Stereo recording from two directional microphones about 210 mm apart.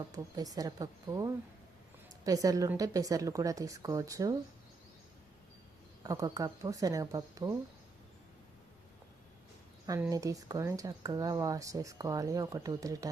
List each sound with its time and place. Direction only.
0.1 s speech: 15° right (ahead or behind)
6.0 s speech: 15° right (ahead or behind)
9.8 s speech: 15° right (ahead or behind)